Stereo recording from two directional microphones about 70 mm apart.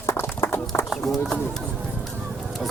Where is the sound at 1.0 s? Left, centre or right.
Centre.